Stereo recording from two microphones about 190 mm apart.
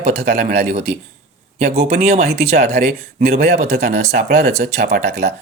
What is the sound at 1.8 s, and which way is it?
Speech, 35° right (ahead or behind).